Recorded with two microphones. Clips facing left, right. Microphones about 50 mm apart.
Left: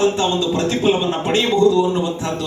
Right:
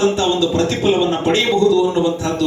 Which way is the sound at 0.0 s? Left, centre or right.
Left.